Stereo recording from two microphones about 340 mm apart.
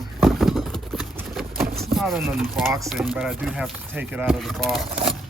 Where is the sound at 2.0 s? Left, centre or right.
Centre.